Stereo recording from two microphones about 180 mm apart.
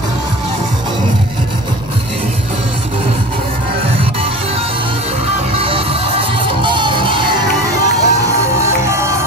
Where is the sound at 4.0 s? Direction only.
30° right (ahead or behind).